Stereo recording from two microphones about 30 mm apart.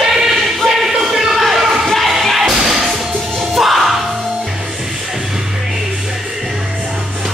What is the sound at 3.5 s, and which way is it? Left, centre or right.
Music, centre.